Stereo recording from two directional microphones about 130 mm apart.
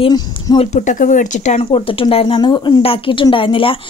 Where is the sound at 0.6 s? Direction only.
65° left (ahead or behind).